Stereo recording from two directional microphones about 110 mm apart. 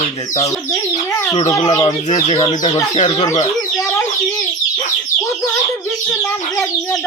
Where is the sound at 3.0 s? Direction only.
70° left (ahead or behind).